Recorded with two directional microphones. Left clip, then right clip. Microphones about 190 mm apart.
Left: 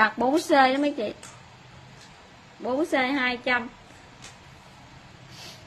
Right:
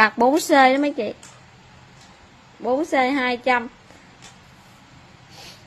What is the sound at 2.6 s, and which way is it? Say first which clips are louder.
A woman's voice: right 5 dB; 35° right (ahead or behind).